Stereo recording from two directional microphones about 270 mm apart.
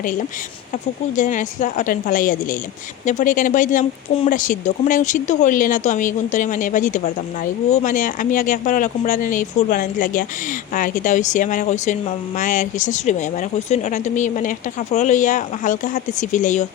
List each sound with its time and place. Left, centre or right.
0.0 s speech: left